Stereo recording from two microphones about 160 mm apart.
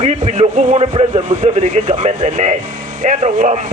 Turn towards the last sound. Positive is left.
turn(degrees=-55)  # may be behind; listen again after turning